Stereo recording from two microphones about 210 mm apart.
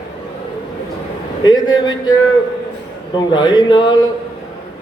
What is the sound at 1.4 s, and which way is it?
Speech, 20° left (ahead or behind).